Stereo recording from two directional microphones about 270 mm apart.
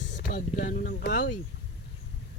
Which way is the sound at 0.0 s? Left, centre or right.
Left.